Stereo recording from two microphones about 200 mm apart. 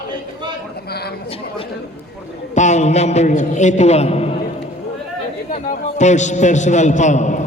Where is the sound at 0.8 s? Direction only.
50° left (ahead or behind).